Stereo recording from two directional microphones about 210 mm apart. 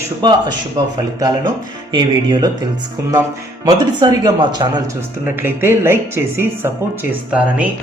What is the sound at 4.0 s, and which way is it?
A man's voice, 20° right (ahead or behind).